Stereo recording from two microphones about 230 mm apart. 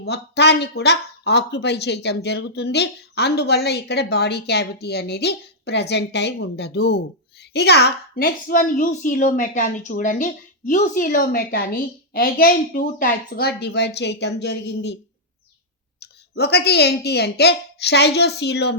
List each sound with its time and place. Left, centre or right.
0.0 s a woman's voice: left
16.0 s speech: left